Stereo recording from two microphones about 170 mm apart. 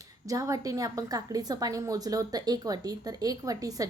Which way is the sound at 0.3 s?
20° right (ahead or behind).